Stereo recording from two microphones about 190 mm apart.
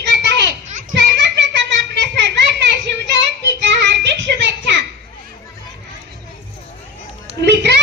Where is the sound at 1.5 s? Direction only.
65° right (ahead or behind).